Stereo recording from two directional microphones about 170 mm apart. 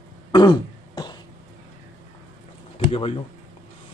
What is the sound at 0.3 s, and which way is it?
Throat clearing, 25° left (ahead or behind).